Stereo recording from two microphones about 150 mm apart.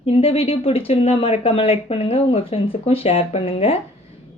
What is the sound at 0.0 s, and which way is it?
Speech, 40° left (ahead or behind).